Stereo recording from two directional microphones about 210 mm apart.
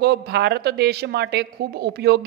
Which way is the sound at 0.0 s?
50° right (ahead or behind).